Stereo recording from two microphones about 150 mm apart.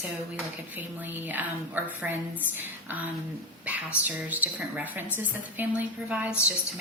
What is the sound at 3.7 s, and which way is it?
A woman's voice, 10° right (ahead or behind).